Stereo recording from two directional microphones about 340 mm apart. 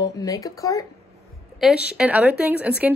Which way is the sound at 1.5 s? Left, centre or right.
Centre.